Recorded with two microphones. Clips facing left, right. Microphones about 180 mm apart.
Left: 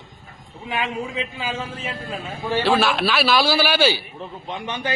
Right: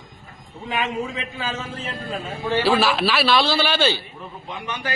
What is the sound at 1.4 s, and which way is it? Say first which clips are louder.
Speech: left 1 dB; 10° left (ahead or behind).